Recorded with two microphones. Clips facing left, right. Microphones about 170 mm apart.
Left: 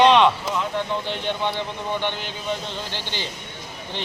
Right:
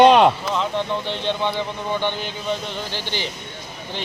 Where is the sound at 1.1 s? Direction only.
20° right (ahead or behind).